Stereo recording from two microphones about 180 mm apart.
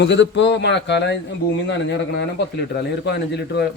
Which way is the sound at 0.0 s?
80° left.